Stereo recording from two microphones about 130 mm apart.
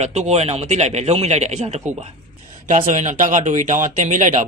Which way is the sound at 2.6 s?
80° right.